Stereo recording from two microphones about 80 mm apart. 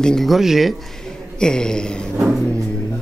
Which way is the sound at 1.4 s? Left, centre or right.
Centre.